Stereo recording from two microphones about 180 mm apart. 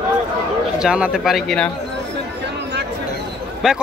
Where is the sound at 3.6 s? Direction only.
5° right (ahead or behind).